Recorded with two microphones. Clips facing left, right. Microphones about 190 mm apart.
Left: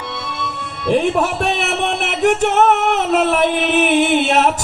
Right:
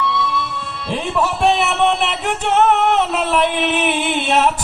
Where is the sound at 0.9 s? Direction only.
50° left (ahead or behind).